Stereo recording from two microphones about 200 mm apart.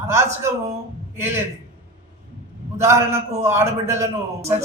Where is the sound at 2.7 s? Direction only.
15° right (ahead or behind).